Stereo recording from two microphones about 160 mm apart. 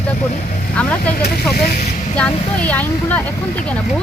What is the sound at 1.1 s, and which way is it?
Speech, 70° left (ahead or behind).